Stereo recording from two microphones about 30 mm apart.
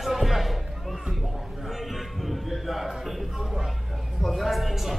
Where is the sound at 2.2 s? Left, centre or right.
Centre.